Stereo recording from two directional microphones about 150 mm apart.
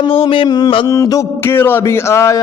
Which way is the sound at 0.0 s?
40° left (ahead or behind).